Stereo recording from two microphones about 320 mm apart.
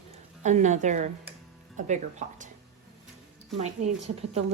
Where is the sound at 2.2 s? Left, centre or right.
Right.